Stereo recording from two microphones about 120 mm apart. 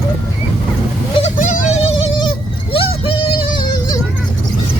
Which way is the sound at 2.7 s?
50° left (ahead or behind).